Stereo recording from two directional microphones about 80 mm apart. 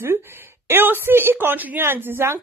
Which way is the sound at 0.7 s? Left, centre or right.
Right.